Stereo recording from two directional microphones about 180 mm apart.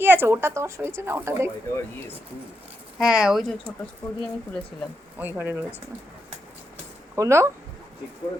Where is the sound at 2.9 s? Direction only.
5° right (ahead or behind).